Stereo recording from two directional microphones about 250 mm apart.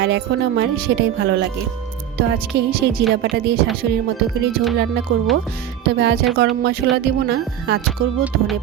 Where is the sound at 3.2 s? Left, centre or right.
Right.